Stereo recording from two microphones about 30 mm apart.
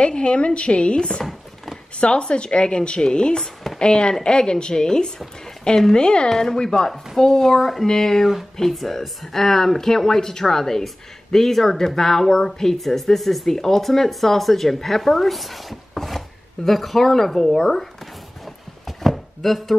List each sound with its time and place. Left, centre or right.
0.0 s a woman's voice: left
6.2 s a woman's voice: centre
7.8 s speech: centre
13.6 s speech: centre
18.9 s chopping: centre